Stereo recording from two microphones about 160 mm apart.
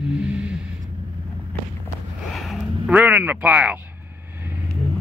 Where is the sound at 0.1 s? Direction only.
5° right (ahead or behind).